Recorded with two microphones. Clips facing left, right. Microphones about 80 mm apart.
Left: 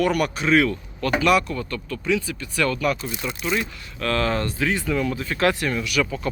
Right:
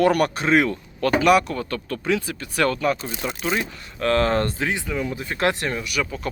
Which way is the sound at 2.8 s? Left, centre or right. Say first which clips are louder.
Right 1 dB; right.